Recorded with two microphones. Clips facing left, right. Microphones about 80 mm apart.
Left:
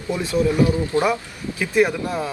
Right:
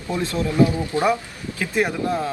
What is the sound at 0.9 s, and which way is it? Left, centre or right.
Speech, right.